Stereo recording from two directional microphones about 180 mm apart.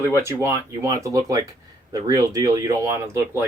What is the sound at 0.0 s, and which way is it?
Speech, 15° right (ahead or behind).